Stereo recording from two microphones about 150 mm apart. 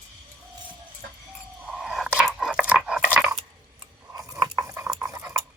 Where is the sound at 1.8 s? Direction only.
5° right (ahead or behind).